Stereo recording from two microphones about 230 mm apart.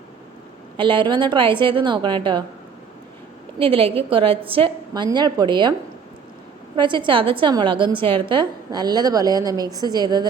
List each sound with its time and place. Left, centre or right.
0.8 s a woman's voice: right
3.6 s a woman's voice: right
6.7 s a woman's voice: right